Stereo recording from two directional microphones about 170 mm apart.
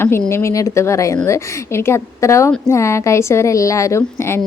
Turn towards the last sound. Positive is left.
turn(degrees=15)  # may be behind; listen again after turning